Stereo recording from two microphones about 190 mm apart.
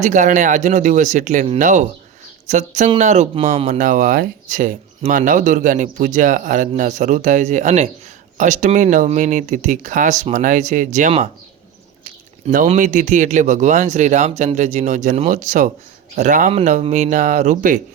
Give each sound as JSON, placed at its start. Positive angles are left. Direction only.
{"t": 0.0, "sound": "speech", "side_deg": -40}
{"t": 12.7, "sound": "speech", "side_deg": -40}